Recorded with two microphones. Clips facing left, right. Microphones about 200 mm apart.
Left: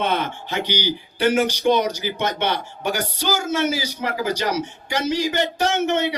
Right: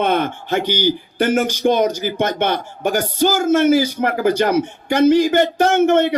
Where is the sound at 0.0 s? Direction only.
50° right (ahead or behind).